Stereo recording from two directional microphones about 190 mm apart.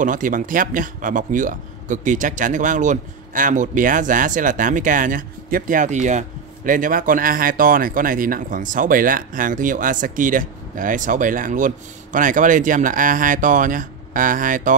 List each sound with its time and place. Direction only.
0.0 s speech: 45° right (ahead or behind)